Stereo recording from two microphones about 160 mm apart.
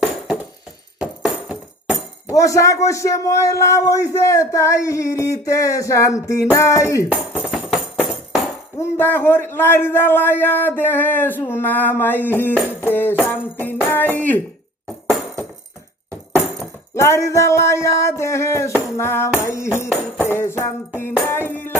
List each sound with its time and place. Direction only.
0.9 s music: 5° right (ahead or behind)
2.3 s a man's voice: 20° left (ahead or behind)
7.4 s tambourine: 5° right (ahead or behind)
8.8 s a man's voice: 15° left (ahead or behind)
16.9 s a man's voice: 15° left (ahead or behind)
21.2 s music: 10° left (ahead or behind)